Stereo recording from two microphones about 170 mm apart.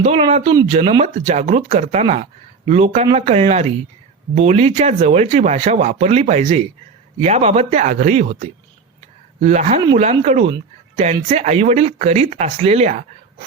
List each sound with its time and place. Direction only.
0.0 s speech: 40° right (ahead or behind)